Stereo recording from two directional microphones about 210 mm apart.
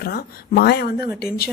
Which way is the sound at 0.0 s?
50° left (ahead or behind).